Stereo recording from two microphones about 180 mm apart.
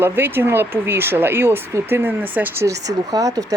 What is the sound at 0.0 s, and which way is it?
Speech, 10° right (ahead or behind).